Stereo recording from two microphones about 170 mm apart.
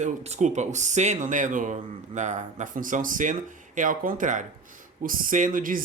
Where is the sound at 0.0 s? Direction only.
40° right (ahead or behind).